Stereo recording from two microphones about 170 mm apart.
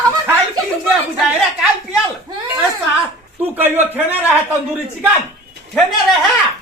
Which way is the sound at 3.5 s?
10° right (ahead or behind).